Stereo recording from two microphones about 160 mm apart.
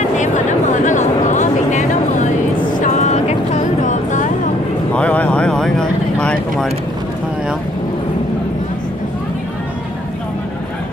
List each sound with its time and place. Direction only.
0.2 s a sound: 50° left (ahead or behind)
2.8 s music: 50° left (ahead or behind)
4.9 s vehicle: 10° left (ahead or behind)